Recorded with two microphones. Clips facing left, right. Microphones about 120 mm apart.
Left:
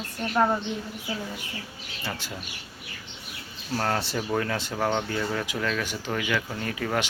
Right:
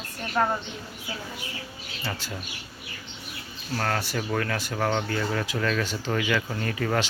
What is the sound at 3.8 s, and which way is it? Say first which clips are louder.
Speech: left 1 dB; 20° left (ahead or behind).